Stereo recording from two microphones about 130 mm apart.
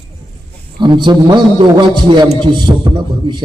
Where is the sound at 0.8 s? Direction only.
35° right (ahead or behind).